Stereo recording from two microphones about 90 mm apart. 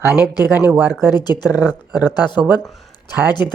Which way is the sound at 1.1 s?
50° left (ahead or behind).